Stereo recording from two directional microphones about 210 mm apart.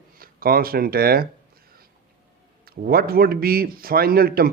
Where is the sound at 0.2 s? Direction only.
45° right (ahead or behind).